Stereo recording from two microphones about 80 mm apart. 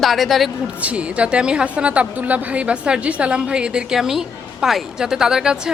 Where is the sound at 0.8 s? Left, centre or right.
Centre.